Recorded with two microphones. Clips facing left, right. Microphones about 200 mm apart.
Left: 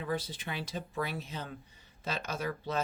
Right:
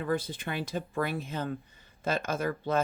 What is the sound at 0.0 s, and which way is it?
Speech, 50° right (ahead or behind).